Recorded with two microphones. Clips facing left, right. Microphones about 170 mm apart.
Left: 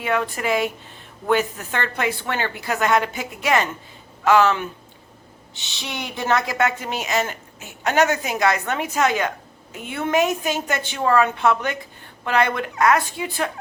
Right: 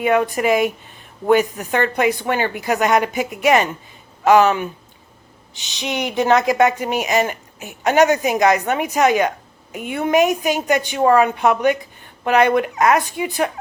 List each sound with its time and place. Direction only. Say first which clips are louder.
0.0 s speech: right 6 dB; 15° right (ahead or behind)
5.7 s speech: right 10 dB; 20° right (ahead or behind)